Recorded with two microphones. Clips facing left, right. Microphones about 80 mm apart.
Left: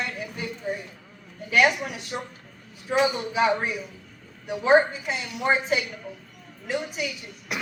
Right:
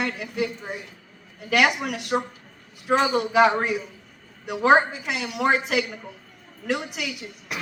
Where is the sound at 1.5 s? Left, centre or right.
Right.